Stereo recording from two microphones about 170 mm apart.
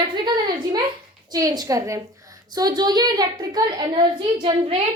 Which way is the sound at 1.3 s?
25° right (ahead or behind).